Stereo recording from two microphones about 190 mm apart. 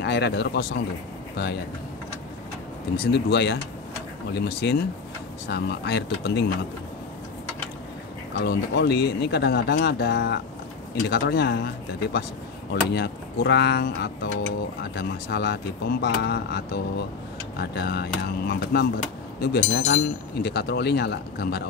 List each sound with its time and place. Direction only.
0.0 s speech: 65° left (ahead or behind)
3.1 s speech: 65° left (ahead or behind)
8.4 s speech: 60° left (ahead or behind)